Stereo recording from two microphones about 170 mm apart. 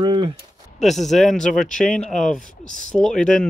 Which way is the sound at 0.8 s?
Centre (ahead or behind).